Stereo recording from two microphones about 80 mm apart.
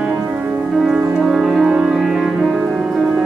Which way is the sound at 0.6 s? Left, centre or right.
Centre.